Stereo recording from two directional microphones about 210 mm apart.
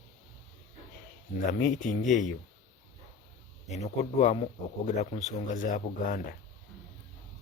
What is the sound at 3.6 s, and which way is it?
A man's voice, 30° left (ahead or behind).